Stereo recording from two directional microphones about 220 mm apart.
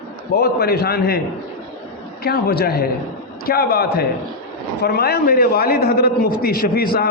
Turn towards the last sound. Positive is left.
turn(degrees=45)  # may be behind; listen again after turning